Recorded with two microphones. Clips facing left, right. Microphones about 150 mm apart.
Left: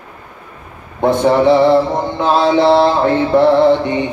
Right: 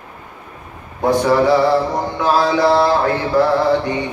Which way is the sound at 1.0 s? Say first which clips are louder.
Left 3 dB; 25° left (ahead or behind).